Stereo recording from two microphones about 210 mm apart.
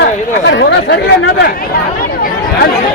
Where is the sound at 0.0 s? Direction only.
55° left (ahead or behind).